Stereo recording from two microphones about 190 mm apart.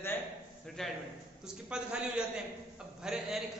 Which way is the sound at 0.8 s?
Centre (ahead or behind).